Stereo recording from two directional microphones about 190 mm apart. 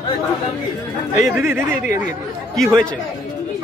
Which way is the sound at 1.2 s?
15° right (ahead or behind).